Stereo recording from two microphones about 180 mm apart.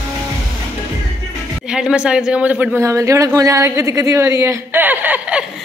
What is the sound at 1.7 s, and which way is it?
A man's voice, 5° right (ahead or behind).